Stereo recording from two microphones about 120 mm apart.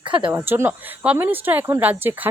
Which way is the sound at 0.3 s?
15° right (ahead or behind).